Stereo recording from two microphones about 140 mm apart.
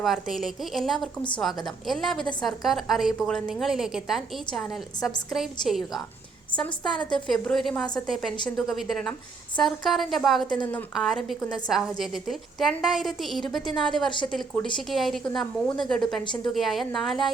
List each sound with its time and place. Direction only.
0.0 s a woman's voice: centre (ahead or behind)
16.2 s a woman's voice: 35° left (ahead or behind)
16.5 s a woman's voice: centre (ahead or behind)